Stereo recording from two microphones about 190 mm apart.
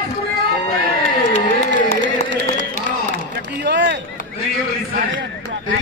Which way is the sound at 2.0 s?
70° right (ahead or behind).